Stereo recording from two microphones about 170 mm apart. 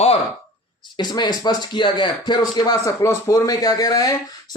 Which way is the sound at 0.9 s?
25° left (ahead or behind).